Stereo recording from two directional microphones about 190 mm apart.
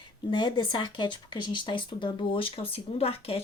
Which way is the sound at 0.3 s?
25° left (ahead or behind).